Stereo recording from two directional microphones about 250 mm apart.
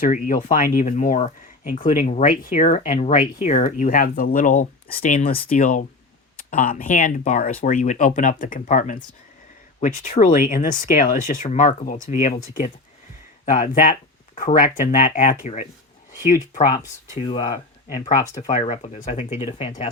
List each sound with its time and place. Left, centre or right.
0.0 s speech: left
13.4 s speech: left
16.3 s speech: left
17.2 s speech: left